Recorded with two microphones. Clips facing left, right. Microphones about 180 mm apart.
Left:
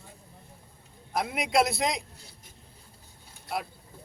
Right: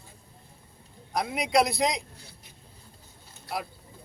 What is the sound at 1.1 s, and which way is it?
Speech, centre (ahead or behind).